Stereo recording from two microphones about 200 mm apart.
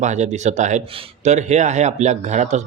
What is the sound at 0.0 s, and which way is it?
Speech, 35° right (ahead or behind).